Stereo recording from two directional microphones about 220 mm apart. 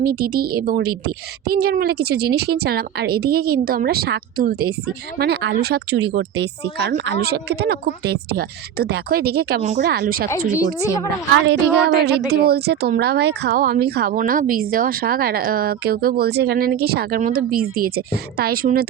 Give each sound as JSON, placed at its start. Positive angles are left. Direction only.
{"t": 0.0, "sound": "a woman's voice", "side_deg": -45}
{"t": 11.4, "sound": "a woman's voice", "side_deg": -50}